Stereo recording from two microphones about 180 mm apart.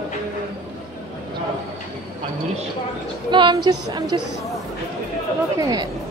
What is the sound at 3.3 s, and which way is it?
Speech, 25° right (ahead or behind).